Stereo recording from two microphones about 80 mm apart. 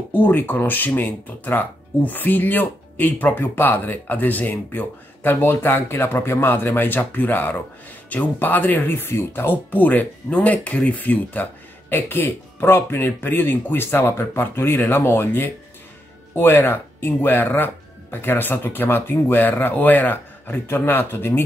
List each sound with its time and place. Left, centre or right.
0.1 s speech: left